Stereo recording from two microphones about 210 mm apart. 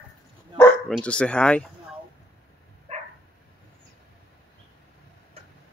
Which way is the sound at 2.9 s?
30° right (ahead or behind).